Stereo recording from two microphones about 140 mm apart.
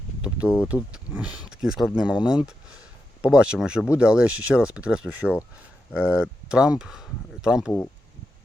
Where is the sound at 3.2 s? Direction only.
10° right (ahead or behind).